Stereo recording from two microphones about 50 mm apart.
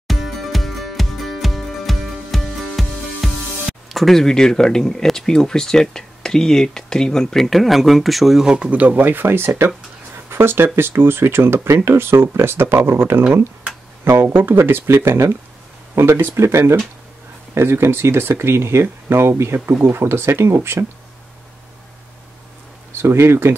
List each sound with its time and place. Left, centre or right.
0.1 s music: centre
8.5 s speech: right
11.6 s speech: right
16.3 s speech: right
17.6 s speech: right
22.9 s speech: right